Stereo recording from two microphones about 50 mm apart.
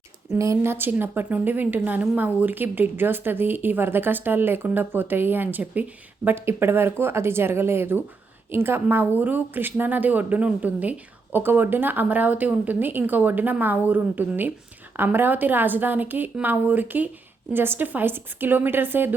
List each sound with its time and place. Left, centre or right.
0.3 s speech: right
0.6 s speech: right
0.9 s speech: right
6.2 s a woman's voice: right
17.5 s speech: right